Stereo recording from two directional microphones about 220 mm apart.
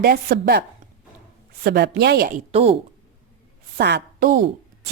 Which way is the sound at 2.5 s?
25° right (ahead or behind).